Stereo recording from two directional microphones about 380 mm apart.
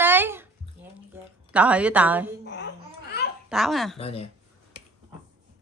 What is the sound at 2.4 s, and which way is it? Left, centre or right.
Babbling, left.